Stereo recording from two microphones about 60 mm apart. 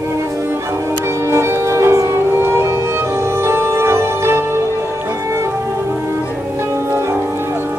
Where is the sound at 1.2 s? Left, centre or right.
Right.